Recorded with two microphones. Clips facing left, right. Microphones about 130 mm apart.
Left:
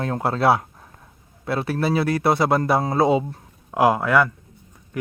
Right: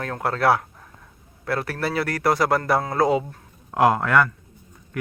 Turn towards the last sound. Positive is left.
turn(degrees=10)  # may be behind; listen again after turning